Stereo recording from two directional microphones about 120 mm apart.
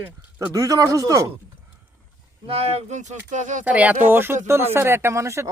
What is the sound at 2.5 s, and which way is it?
Speech, 55° right (ahead or behind).